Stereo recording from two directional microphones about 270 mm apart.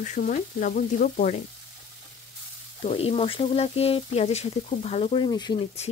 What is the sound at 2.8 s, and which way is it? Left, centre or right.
Speech, left.